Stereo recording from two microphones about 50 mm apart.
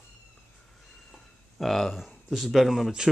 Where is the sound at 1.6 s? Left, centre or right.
Centre.